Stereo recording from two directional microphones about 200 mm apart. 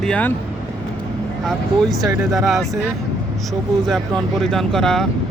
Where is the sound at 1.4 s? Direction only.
Centre (ahead or behind).